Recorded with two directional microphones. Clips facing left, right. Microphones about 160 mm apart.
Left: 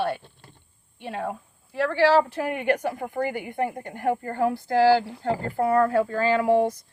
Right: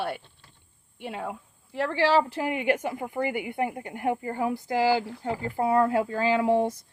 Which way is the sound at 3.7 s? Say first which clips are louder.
Left 2 dB; 10° right (ahead or behind).